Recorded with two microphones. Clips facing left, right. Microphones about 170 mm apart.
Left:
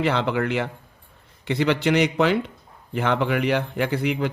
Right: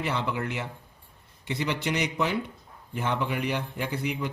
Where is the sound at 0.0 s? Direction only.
75° left (ahead or behind).